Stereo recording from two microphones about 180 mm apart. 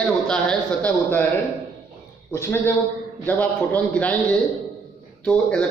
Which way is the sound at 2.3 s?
15° left (ahead or behind).